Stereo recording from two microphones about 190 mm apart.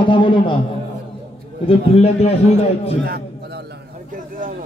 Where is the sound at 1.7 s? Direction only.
30° left (ahead or behind).